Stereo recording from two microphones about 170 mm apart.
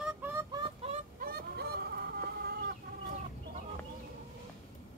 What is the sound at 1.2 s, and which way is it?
Honk, 65° right (ahead or behind).